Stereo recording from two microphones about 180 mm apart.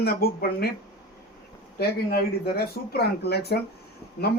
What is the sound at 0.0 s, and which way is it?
Speech, 60° left (ahead or behind).